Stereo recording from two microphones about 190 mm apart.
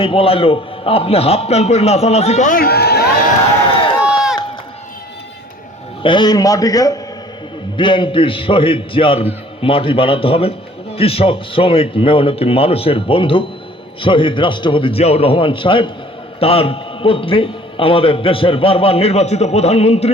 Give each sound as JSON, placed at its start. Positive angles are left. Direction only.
{"t": 0.0, "sound": "a man's voice", "side_deg": 30}
{"t": 3.7, "sound": "a sound", "side_deg": 25}
{"t": 4.0, "sound": "run", "side_deg": -5}
{"t": 6.0, "sound": "a man's voice", "side_deg": 25}